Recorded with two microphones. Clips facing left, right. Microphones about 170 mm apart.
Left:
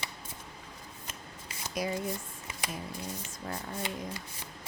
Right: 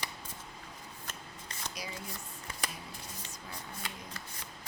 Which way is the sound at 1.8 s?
50° left (ahead or behind).